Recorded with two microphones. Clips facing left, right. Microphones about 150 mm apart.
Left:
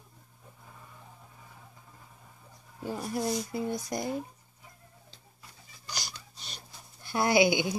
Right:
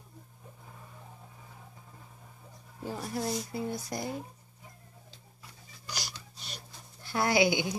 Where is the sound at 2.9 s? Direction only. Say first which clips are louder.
Left 2 dB; 15° left (ahead or behind).